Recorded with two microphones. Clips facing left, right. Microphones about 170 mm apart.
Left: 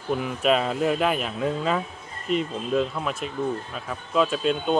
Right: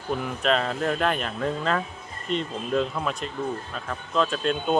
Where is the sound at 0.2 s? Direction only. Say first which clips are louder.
Left 2 dB; 5° left (ahead or behind).